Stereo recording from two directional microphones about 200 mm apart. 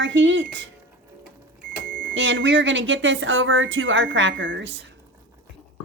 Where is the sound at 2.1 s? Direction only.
65° right (ahead or behind).